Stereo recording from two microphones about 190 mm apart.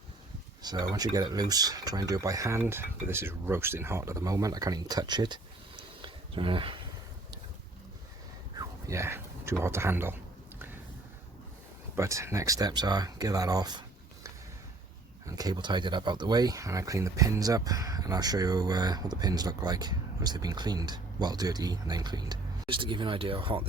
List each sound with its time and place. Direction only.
0.6 s speech: 20° right (ahead or behind)
8.5 s speech: 15° right (ahead or behind)
11.9 s speech: 15° right (ahead or behind)
15.3 s speech: 20° right (ahead or behind)